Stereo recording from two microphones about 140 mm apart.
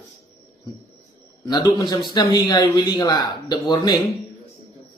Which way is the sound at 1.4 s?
30° left (ahead or behind).